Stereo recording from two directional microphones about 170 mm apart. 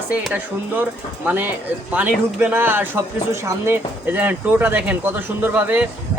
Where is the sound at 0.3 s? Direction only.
10° right (ahead or behind).